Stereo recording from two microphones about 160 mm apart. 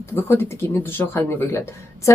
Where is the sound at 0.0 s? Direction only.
15° left (ahead or behind).